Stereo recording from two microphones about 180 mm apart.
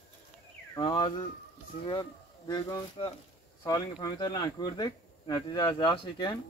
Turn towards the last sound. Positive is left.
turn(degrees=25)  # may be behind; listen again after turning